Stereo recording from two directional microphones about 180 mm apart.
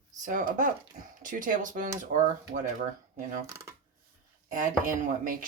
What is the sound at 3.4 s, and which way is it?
Speech, 15° right (ahead or behind).